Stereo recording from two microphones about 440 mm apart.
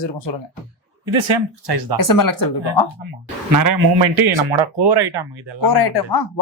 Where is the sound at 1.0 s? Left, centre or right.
Right.